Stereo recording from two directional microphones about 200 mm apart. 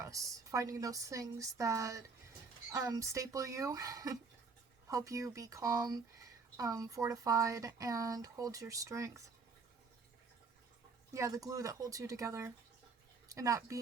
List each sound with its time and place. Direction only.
0.0 s speech: 15° right (ahead or behind)
11.1 s speech: 15° right (ahead or behind)